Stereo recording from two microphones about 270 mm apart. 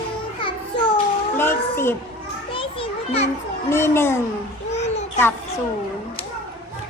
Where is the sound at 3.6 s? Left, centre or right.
Centre.